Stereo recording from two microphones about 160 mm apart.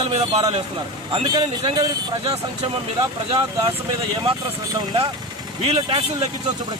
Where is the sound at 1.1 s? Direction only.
30° right (ahead or behind).